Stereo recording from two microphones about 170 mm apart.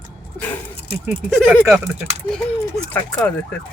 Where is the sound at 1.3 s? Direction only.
Centre (ahead or behind).